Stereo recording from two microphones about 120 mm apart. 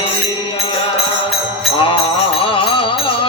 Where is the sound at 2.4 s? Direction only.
45° left (ahead or behind).